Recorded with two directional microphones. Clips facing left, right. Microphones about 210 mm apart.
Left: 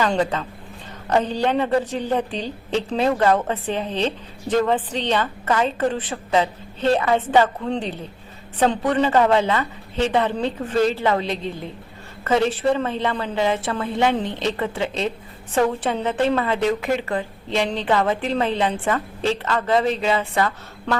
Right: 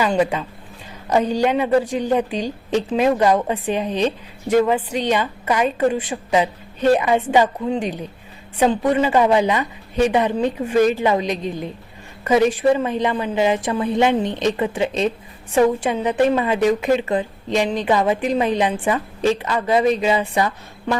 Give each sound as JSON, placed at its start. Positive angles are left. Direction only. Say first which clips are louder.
{"t": 0.0, "sound": "a woman's voice", "louder": "right 2 dB", "side_deg": -10}